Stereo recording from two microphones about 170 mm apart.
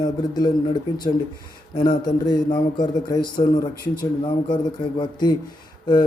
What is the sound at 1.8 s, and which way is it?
A man's voice, 25° left (ahead or behind).